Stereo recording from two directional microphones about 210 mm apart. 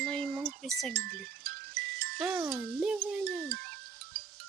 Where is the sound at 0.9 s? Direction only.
45° right (ahead or behind).